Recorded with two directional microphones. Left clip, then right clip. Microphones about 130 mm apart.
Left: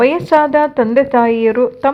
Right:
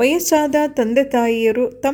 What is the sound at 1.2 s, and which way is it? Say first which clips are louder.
Speech: left 3 dB; 25° left (ahead or behind).